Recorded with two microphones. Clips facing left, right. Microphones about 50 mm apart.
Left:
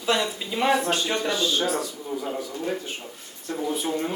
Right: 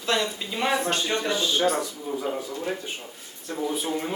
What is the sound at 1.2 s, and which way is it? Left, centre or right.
Speech, right.